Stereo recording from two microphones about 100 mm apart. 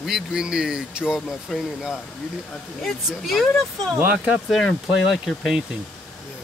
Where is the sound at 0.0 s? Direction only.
5° right (ahead or behind).